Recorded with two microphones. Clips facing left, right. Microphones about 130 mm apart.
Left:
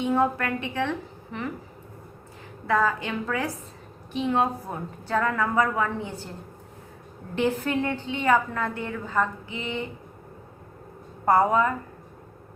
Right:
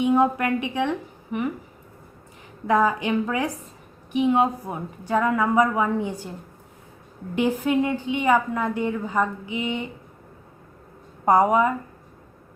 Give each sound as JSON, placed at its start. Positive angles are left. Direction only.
{"t": 0.0, "sound": "a woman's voice", "side_deg": -15}
{"t": 2.6, "sound": "a woman's voice", "side_deg": -15}
{"t": 7.3, "sound": "a woman's voice", "side_deg": -10}
{"t": 11.3, "sound": "a woman's voice", "side_deg": -15}